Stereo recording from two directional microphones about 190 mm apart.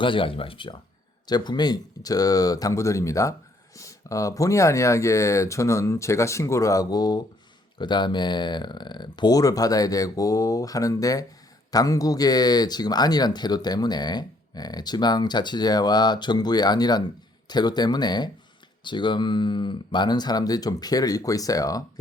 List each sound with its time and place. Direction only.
0.0 s speech: 25° left (ahead or behind)